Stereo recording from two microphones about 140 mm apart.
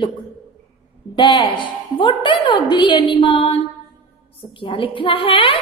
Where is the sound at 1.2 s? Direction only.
35° left (ahead or behind).